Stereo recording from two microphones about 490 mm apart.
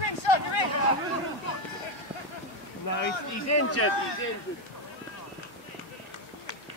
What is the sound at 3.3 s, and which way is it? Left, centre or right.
Speech, left.